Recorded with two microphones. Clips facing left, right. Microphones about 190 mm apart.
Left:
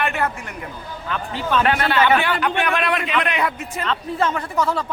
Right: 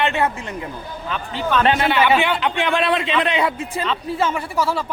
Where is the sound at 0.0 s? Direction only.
25° right (ahead or behind).